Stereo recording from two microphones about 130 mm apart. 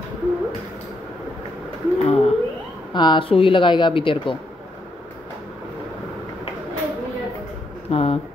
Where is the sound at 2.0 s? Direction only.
50° left (ahead or behind).